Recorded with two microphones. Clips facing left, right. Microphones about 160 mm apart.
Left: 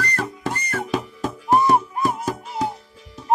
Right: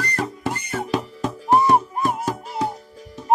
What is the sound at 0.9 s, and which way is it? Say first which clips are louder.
Music: right 1 dB; centre (ahead or behind).